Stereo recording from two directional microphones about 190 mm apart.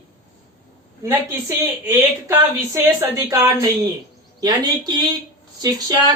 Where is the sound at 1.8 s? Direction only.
15° right (ahead or behind).